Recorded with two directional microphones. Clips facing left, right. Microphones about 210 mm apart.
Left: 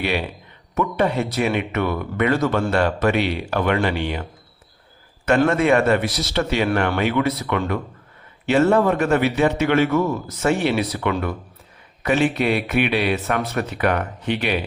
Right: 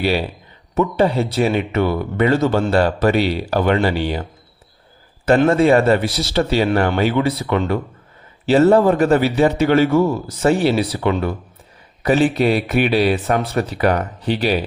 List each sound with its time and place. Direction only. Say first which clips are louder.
0.0 s speech: right 4 dB; 35° right (ahead or behind)
5.5 s speech: right 5 dB; 30° right (ahead or behind)